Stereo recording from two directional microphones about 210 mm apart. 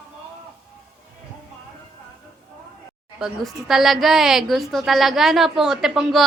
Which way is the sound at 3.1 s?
Centre (ahead or behind).